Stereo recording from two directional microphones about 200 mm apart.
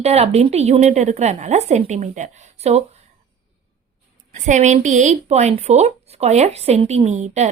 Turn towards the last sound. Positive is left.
turn(degrees=-35)  # may be behind; listen again after turning